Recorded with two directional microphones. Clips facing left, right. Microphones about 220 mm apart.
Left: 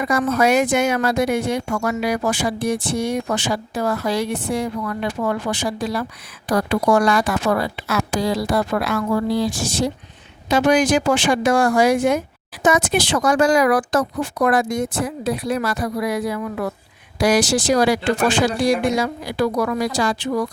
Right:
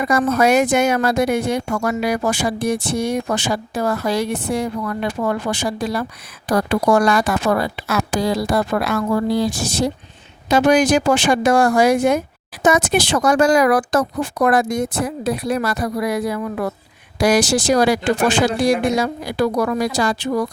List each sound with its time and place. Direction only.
0.0 s speech: 40° right (ahead or behind)